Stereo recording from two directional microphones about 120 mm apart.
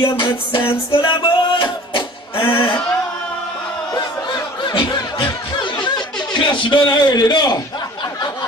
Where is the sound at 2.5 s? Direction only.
45° left (ahead or behind).